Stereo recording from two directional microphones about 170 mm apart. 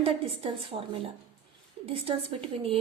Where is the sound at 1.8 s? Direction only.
35° right (ahead or behind).